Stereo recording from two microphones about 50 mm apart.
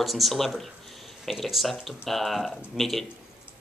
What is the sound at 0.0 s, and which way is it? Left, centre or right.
Speech, centre.